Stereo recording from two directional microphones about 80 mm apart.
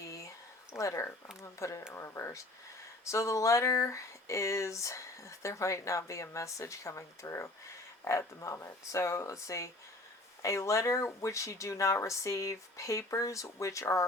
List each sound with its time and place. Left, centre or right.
0.8 s speech: left
8.5 s speech: left